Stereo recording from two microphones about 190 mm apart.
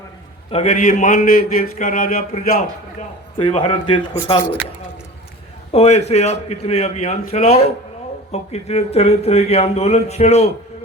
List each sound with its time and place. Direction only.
0.5 s a man's voice: 35° left (ahead or behind)
3.3 s speech: 25° left (ahead or behind)
5.7 s a man's voice: 35° left (ahead or behind)